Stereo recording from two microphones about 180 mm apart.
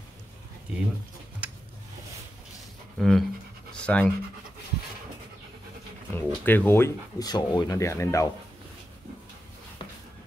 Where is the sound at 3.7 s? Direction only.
5° left (ahead or behind).